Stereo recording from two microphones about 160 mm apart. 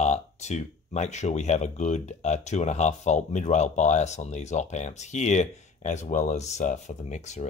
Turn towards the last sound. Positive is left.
turn(degrees=45)  # may be behind; listen again after turning